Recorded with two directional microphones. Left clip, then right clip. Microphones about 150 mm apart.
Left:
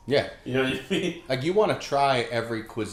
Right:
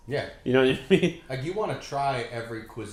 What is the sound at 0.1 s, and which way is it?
Speech, 35° left (ahead or behind).